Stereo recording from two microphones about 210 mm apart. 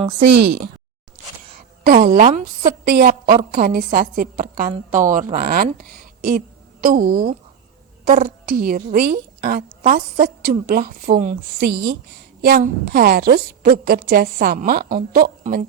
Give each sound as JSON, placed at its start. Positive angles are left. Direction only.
{"t": 0.3, "sound": "a woman's voice", "side_deg": -55}
{"t": 1.8, "sound": "a woman's voice", "side_deg": -45}
{"t": 3.5, "sound": "a woman's voice", "side_deg": -40}
{"t": 11.6, "sound": "a woman's voice", "side_deg": -55}
{"t": 12.4, "sound": "a woman's voice", "side_deg": -45}